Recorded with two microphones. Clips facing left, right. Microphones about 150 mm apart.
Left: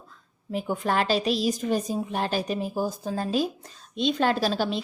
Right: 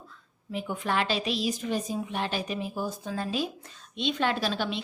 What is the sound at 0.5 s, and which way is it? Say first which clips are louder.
A woman's voice: left 4 dB; 40° left (ahead or behind).